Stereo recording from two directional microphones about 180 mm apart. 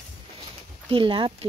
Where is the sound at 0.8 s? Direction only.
30° right (ahead or behind).